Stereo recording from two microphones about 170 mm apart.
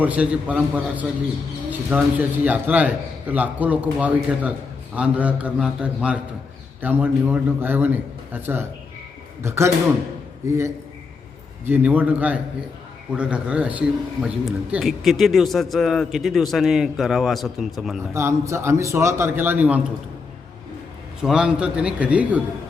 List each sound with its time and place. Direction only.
0.0 s a man's voice: 10° right (ahead or behind)
11.6 s a man's voice: 10° right (ahead or behind)
18.1 s a man's voice: 15° right (ahead or behind)
21.2 s a man's voice: 5° right (ahead or behind)